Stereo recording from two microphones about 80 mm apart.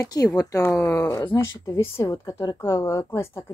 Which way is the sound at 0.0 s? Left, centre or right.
Left.